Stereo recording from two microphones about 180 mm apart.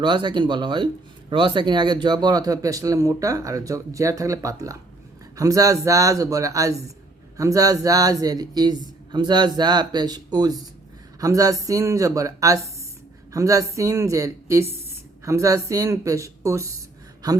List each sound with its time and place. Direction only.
0.0 s a man's voice: 25° right (ahead or behind)